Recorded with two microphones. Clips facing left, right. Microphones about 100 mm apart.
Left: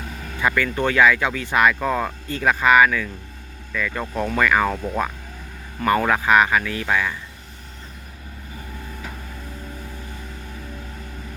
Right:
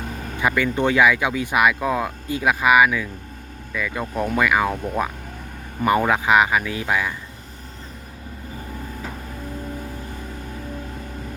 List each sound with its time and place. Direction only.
0.0 s vehicle: 40° right (ahead or behind)
0.3 s speech: 20° right (ahead or behind)